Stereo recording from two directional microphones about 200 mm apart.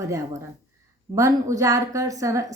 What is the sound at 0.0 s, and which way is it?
Speech, 15° right (ahead or behind).